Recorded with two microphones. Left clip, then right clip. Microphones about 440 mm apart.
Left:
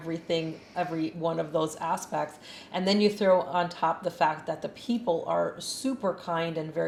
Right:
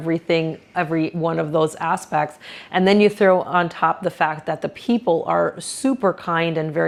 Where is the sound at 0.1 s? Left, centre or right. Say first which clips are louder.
Right 10 dB; right.